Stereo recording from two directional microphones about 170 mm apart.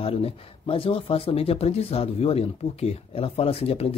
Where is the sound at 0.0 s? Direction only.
35° left (ahead or behind).